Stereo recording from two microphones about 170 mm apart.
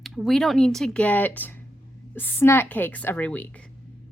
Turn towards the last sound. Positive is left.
turn(degrees=10)  # may be behind; listen again after turning